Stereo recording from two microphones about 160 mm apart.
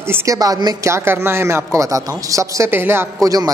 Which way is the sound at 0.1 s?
20° right (ahead or behind).